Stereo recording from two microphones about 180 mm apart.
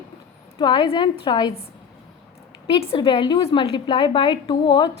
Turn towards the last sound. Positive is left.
turn(degrees=25)  # may be behind; listen again after turning